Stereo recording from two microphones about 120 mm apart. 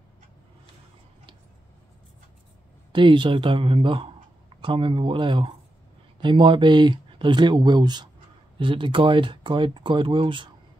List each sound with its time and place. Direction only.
2.9 s speech: 45° right (ahead or behind)